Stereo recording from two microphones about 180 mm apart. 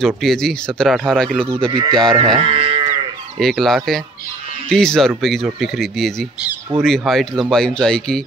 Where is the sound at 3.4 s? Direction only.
Centre (ahead or behind).